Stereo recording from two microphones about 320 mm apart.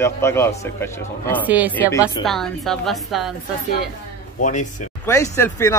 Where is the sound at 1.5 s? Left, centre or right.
Centre.